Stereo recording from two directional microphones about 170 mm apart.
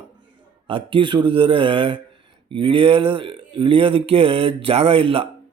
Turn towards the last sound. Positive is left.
turn(degrees=-35)  # may be behind; listen again after turning